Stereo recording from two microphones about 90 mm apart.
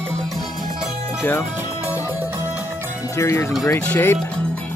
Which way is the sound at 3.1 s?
30° left (ahead or behind).